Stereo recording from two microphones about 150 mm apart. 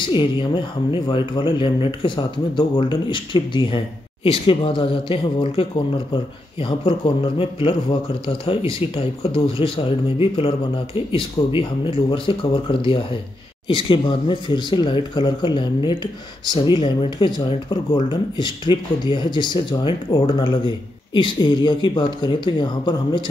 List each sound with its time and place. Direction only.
0.0 s speech: 35° left (ahead or behind)
8.9 s speech: 35° left (ahead or behind)